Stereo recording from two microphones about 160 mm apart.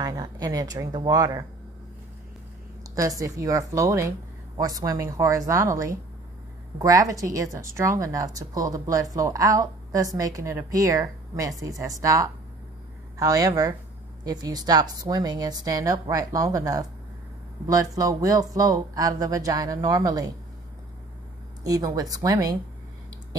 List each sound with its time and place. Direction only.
0.0 s speech: 25° right (ahead or behind)
2.9 s speech: 20° right (ahead or behind)
21.6 s speech: 20° right (ahead or behind)